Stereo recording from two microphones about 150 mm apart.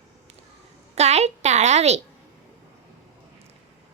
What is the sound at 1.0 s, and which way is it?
A woman's voice, 45° right (ahead or behind).